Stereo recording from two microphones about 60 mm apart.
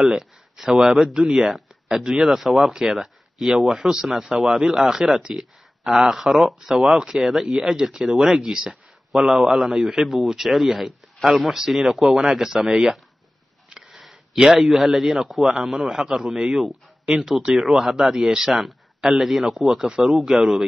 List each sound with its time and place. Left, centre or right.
0.1 s speech: centre
8.1 s speech: centre
8.5 s speech: centre